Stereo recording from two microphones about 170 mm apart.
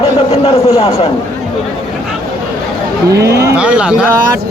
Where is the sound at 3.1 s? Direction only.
15° right (ahead or behind).